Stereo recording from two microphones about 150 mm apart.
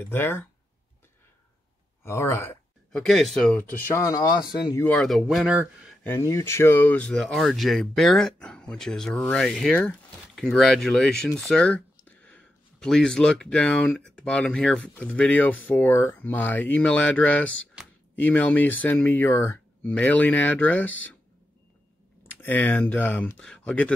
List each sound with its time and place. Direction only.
0.1 s speech: 15° left (ahead or behind)
2.0 s speech: 15° left (ahead or behind)
2.9 s speech: centre (ahead or behind); by 4.5 s 25° left (ahead or behind)
4.8 s speech: 5° left (ahead or behind)
6.0 s speech: 20° left (ahead or behind)
22.3 s speech: 10° left (ahead or behind)